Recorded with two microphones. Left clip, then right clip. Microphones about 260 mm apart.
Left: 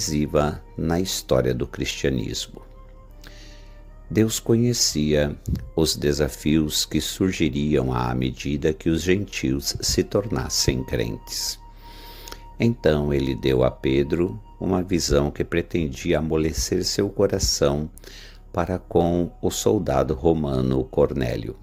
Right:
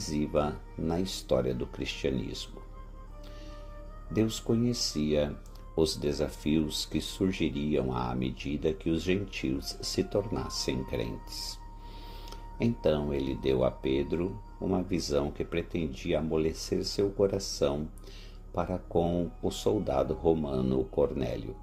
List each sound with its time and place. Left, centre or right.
0.0 s speech: left
4.1 s speech: left